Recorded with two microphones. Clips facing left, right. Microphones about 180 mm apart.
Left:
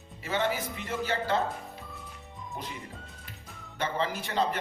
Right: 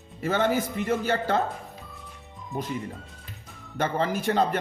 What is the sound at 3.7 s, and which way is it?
Speech, 50° right (ahead or behind).